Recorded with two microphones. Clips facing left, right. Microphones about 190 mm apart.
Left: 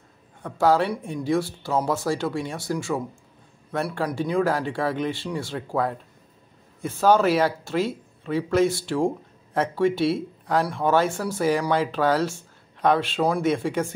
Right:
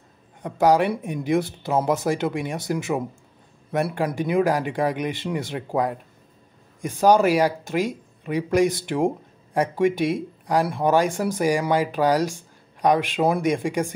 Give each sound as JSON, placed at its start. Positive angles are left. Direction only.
{"t": 0.4, "sound": "speech", "side_deg": -20}